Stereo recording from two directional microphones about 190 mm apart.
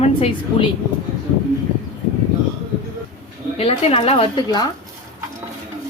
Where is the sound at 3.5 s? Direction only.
30° left (ahead or behind).